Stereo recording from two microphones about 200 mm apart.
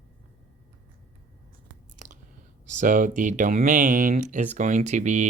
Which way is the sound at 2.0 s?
40° right (ahead or behind).